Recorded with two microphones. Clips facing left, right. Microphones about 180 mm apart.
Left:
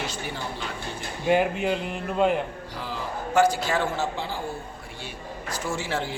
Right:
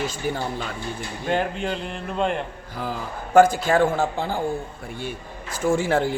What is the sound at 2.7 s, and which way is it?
Speech, 50° right (ahead or behind).